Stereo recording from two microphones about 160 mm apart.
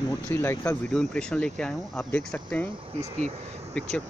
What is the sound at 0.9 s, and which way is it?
Speech, 5° left (ahead or behind).